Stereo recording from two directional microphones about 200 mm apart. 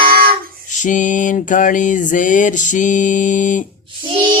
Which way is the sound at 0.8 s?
40° left (ahead or behind).